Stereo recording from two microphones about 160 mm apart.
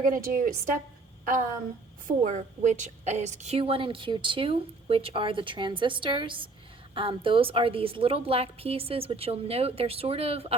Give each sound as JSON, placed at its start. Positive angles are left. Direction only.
{"t": 0.0, "sound": "a woman's voice", "side_deg": -60}
{"t": 2.2, "sound": "a woman's voice", "side_deg": -50}